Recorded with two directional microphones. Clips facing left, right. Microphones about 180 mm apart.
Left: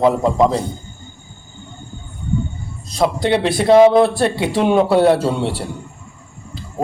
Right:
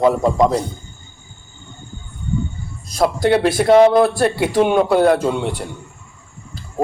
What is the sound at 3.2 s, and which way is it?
Speech, 20° left (ahead or behind).